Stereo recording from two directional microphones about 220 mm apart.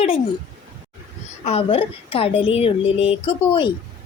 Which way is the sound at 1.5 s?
25° left (ahead or behind).